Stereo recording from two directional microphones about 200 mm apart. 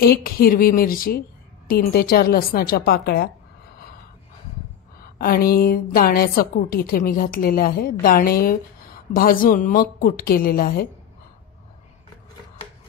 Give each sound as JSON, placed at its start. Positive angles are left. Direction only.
{"t": 0.0, "sound": "a woman's voice", "side_deg": 50}
{"t": 5.0, "sound": "a woman's voice", "side_deg": 50}